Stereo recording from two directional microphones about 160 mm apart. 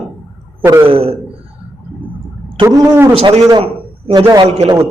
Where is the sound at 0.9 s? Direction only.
35° right (ahead or behind).